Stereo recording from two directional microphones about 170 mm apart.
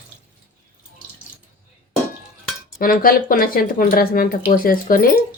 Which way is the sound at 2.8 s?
55° left (ahead or behind).